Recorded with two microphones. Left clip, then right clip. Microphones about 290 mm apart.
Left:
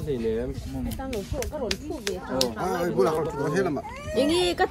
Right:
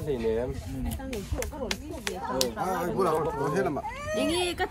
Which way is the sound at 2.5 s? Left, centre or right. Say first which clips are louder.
Left 3 dB; centre.